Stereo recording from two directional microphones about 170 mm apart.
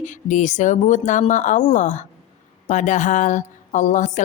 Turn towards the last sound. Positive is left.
turn(degrees=45)  # may be behind; listen again after turning